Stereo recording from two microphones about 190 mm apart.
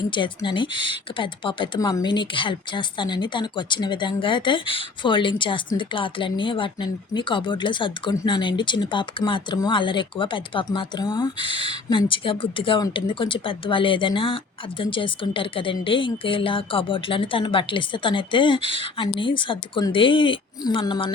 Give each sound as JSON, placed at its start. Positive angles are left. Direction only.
{"t": 0.1, "sound": "speech", "side_deg": 25}